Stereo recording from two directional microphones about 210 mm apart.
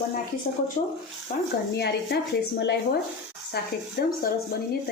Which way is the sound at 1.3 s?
35° left (ahead or behind).